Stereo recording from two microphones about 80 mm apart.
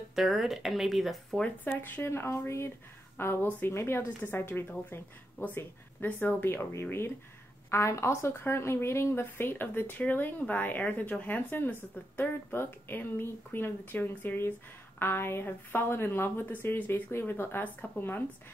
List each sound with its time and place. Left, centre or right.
0.1 s speech: centre
1.7 s a woman's voice: left